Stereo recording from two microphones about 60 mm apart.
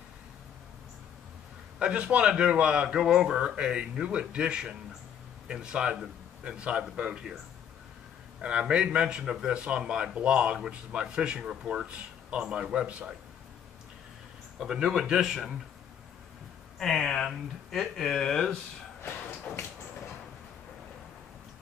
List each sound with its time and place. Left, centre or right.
1.8 s a man's voice: centre
8.4 s a man's voice: centre
14.6 s a man's voice: centre
16.7 s speech: centre
19.5 s a sound: centre